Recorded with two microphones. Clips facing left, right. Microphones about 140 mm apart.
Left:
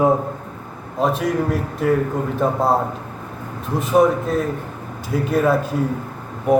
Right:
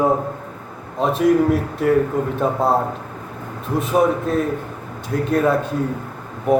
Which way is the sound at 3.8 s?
Centre (ahead or behind).